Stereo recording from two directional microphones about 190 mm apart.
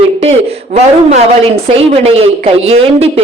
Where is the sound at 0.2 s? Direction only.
35° right (ahead or behind).